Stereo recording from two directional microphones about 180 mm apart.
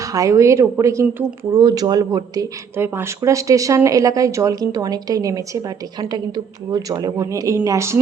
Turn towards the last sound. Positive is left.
turn(degrees=-15)  # may be behind; listen again after turning